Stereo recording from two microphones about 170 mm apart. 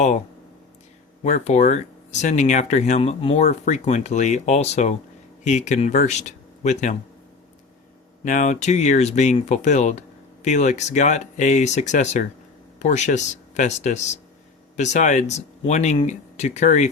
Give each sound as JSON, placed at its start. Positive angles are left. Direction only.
{"t": 1.2, "sound": "speech", "side_deg": 45}
{"t": 8.2, "sound": "speech", "side_deg": 50}